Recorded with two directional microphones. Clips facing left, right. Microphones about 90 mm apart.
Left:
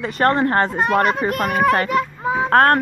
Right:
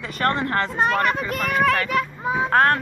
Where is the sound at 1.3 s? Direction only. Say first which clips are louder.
Left 4 dB; 55° left (ahead or behind).